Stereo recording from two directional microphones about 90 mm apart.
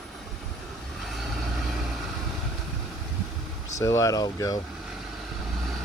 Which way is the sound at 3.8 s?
35° left (ahead or behind).